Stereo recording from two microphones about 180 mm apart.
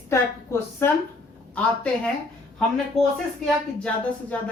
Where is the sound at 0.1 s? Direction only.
15° left (ahead or behind).